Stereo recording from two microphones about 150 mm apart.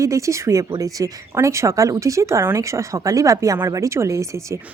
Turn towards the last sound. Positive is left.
turn(degrees=-20)  # may be behind; listen again after turning